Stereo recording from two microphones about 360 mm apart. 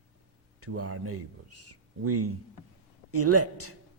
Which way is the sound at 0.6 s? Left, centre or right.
Right.